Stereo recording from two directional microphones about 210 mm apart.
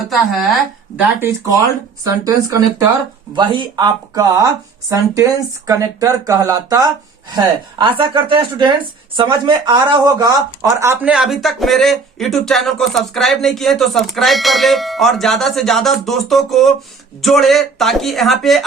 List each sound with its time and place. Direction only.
0.1 s speech: centre (ahead or behind)
0.9 s speech: 10° right (ahead or behind)